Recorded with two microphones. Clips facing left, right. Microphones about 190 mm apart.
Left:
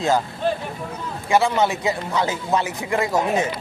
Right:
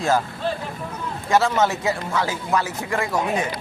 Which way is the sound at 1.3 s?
15° left (ahead or behind).